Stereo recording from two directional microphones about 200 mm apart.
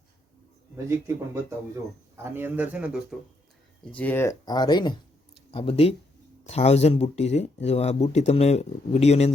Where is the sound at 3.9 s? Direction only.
10° left (ahead or behind).